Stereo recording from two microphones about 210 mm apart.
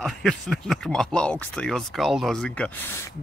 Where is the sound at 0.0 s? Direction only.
Centre (ahead or behind).